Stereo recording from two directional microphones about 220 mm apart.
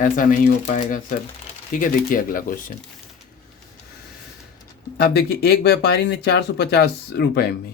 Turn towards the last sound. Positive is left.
turn(degrees=45)  # may be behind; listen again after turning